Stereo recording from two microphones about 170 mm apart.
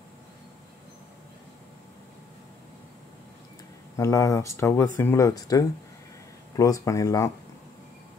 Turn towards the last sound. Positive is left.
turn(degrees=20)  # may be behind; listen again after turning